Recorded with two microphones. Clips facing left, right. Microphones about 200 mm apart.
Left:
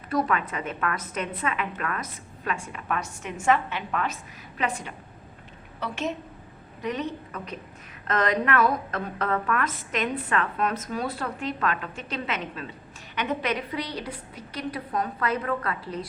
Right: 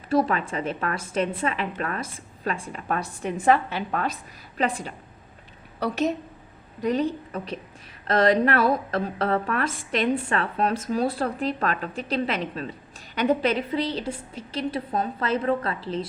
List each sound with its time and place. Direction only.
0.1 s a woman's voice: 30° right (ahead or behind)